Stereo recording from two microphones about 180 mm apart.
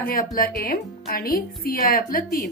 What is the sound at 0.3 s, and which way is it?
A woman's voice, 55° left (ahead or behind).